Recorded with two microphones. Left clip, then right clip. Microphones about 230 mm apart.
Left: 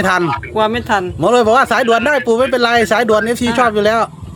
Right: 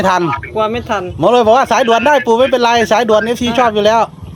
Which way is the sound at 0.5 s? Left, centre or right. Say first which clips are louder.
Left 3 dB; left.